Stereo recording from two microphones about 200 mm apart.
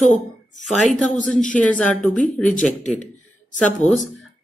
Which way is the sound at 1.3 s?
40° left (ahead or behind).